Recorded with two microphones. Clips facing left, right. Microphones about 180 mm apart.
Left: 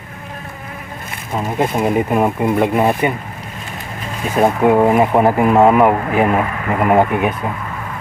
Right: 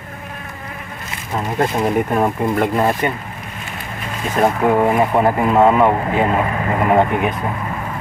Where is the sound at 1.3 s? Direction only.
10° left (ahead or behind).